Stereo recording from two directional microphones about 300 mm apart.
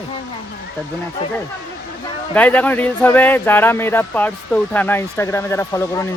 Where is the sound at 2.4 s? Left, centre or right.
Centre.